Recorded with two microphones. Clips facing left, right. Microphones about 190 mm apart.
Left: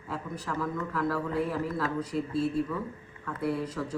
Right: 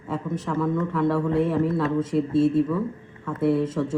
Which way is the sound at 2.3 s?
25° right (ahead or behind).